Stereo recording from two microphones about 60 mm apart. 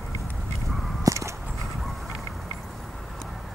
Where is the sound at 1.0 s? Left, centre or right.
Right.